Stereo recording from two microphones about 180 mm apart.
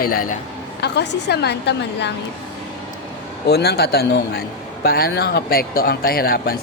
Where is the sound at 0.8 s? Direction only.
70° left (ahead or behind).